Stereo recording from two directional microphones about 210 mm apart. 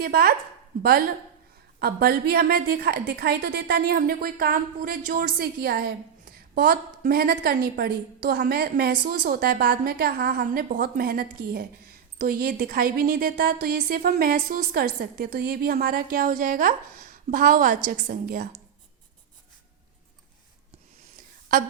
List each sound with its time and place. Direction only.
0.0 s a woman's voice: 45° right (ahead or behind)